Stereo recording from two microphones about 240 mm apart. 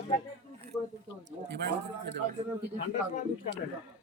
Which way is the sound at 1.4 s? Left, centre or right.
Right.